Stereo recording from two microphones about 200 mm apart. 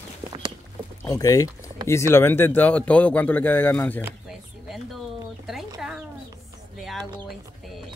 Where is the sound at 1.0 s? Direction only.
15° left (ahead or behind).